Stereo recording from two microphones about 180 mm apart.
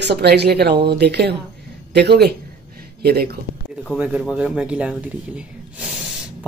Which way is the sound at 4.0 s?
5° right (ahead or behind).